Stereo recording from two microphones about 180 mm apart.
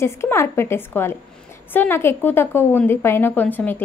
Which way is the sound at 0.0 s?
15° left (ahead or behind).